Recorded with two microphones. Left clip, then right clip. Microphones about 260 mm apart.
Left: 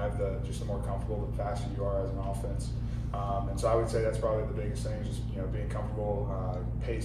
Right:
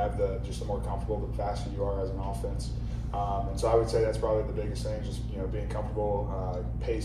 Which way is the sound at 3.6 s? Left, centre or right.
Right.